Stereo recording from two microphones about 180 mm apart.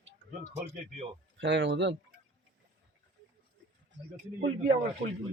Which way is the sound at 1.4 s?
80° right.